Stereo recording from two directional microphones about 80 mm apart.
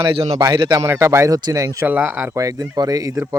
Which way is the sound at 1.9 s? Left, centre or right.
Right.